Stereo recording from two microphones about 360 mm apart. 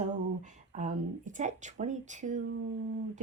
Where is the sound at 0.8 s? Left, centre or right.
Right.